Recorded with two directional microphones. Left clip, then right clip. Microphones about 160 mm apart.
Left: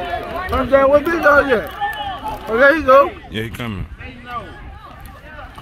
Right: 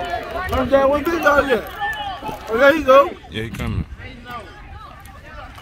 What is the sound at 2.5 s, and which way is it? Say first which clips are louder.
Speech: left 1 dB; 45° right (ahead or behind).